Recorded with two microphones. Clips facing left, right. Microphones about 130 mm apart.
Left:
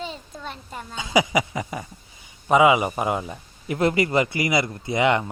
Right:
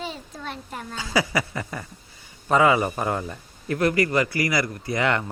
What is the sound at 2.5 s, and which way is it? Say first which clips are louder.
A man's voice: left 2 dB; 15° left (ahead or behind).